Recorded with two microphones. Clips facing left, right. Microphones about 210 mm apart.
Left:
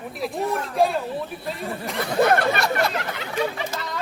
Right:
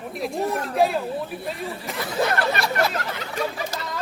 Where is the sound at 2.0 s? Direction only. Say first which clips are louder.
Left 4 dB; 55° left (ahead or behind).